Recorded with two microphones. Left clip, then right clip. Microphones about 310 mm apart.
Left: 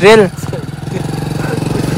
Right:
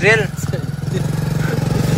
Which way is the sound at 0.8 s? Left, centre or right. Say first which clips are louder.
Left 4 dB; left.